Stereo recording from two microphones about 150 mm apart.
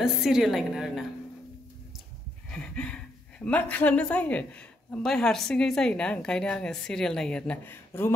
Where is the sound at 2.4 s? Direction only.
5° left (ahead or behind).